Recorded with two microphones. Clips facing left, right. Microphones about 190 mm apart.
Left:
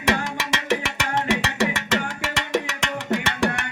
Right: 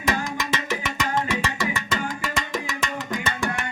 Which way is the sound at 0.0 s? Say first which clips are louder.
Left 2 dB; 75° left (ahead or behind).